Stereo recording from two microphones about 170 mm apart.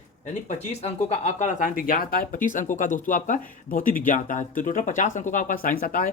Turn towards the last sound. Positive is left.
turn(degrees=55)  # may be behind; listen again after turning